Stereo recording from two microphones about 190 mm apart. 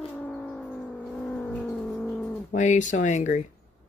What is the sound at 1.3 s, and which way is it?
Bird, 5° left (ahead or behind).